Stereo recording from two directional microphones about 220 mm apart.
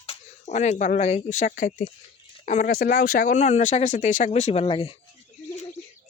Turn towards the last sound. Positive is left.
turn(degrees=25)  # may be behind; listen again after turning